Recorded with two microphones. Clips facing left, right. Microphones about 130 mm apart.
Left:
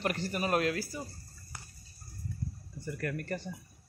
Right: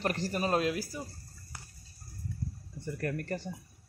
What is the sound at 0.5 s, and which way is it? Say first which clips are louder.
Speech: left 1 dB; 20° right (ahead or behind).